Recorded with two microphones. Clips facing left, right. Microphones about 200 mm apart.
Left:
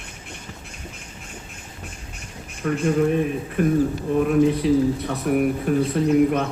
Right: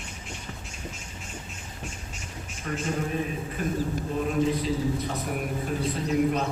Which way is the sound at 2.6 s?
60° left (ahead or behind).